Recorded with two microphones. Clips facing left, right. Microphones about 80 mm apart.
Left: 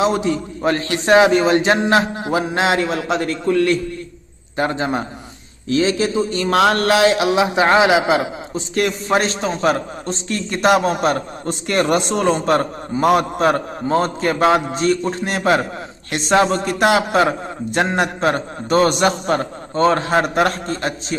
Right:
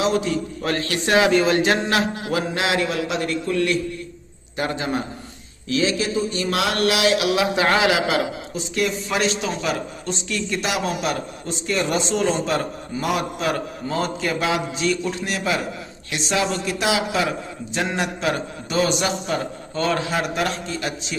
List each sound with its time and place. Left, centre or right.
0.0 s a man's voice: left
8.7 s a man's voice: left